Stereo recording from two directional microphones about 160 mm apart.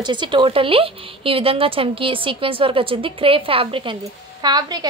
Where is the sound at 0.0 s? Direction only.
30° right (ahead or behind).